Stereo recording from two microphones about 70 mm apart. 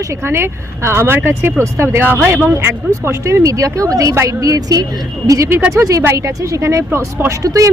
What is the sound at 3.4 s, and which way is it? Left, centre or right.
Speech, right.